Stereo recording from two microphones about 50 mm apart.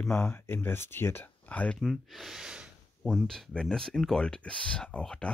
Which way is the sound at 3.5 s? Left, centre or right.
Centre.